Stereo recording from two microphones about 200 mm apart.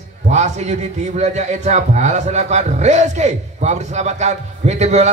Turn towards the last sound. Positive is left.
turn(degrees=-35)  # may be behind; listen again after turning